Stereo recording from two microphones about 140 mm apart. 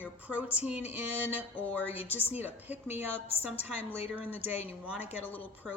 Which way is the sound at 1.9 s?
45° left (ahead or behind).